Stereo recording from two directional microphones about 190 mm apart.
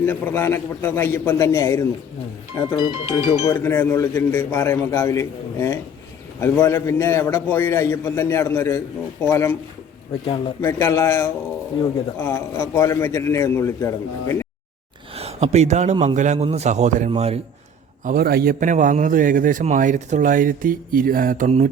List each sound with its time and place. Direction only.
0.0 s a man's voice: 10° left (ahead or behind)
2.9 s speech: 20° right (ahead or behind)
3.4 s a man's voice: 10° left (ahead or behind)
10.6 s a man's voice: 15° left (ahead or behind)
15.1 s a man's voice: 30° right (ahead or behind)
18.0 s a man's voice: 50° right (ahead or behind)